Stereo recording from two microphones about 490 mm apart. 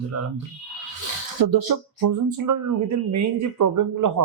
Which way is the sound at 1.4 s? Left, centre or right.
Right.